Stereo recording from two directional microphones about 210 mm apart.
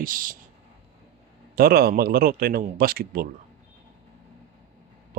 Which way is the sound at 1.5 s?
45° right (ahead or behind).